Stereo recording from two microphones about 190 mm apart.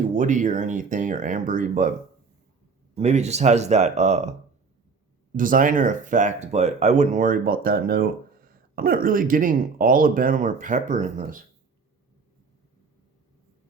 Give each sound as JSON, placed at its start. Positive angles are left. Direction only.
{"t": 0.2, "sound": "speech", "side_deg": -40}
{"t": 2.9, "sound": "speech", "side_deg": -35}
{"t": 5.4, "sound": "speech", "side_deg": -45}